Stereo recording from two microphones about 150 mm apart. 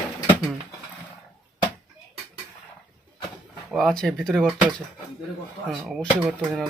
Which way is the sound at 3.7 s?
5° left (ahead or behind).